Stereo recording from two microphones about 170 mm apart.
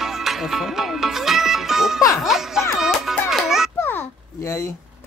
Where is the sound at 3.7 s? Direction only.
15° left (ahead or behind).